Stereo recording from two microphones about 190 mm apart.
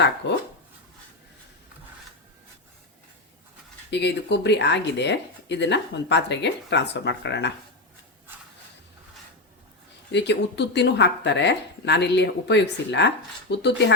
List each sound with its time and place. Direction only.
0.2 s speech: 70° left (ahead or behind)
3.8 s speech: 65° left (ahead or behind)
10.1 s speech: 65° left (ahead or behind)